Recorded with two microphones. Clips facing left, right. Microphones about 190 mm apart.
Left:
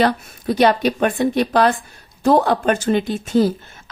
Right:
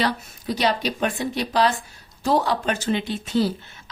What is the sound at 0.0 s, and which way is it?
A woman's voice, 55° left (ahead or behind).